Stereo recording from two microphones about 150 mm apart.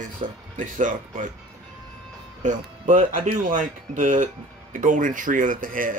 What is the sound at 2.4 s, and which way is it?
Speech, 55° right (ahead or behind).